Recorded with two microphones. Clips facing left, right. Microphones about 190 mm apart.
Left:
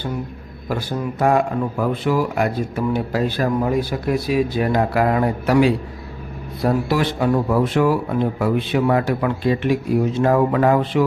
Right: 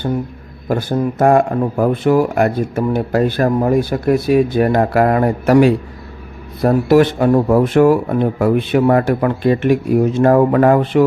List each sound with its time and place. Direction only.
0.7 s speech: 50° right (ahead or behind)